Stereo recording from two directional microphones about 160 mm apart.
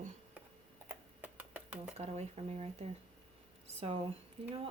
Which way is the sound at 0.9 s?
10° right (ahead or behind).